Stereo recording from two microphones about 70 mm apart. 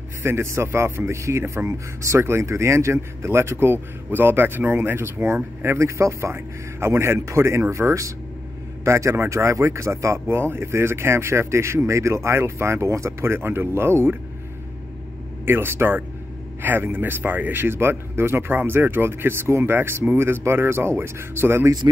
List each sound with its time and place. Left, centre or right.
0.2 s speech: right
15.4 s speech: right